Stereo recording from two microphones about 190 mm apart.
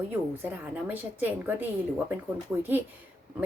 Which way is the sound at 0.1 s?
10° right (ahead or behind).